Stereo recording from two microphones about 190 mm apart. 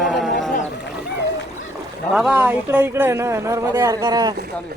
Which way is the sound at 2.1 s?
5° right (ahead or behind).